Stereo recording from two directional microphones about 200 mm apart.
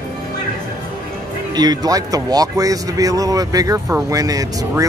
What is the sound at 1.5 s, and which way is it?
Speech, 20° right (ahead or behind).